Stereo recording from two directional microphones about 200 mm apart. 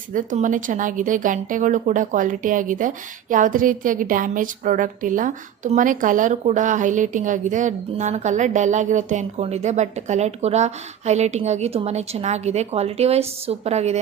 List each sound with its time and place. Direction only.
0.1 s speech: 40° right (ahead or behind)